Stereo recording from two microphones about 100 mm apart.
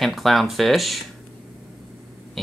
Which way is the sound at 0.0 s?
Centre (ahead or behind).